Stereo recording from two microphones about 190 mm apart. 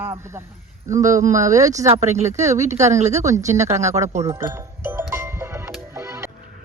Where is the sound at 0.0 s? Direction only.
15° right (ahead or behind).